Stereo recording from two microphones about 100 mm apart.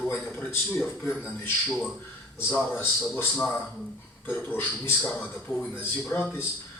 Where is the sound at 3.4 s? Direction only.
5° left (ahead or behind).